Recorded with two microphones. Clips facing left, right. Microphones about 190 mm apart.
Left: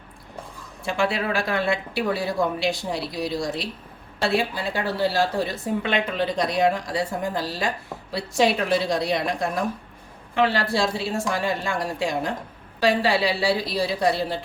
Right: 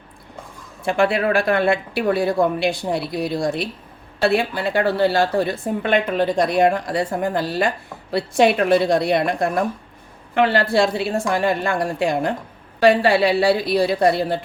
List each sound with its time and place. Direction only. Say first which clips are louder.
0.9 s a woman's voice: right 6 dB; 55° right (ahead or behind)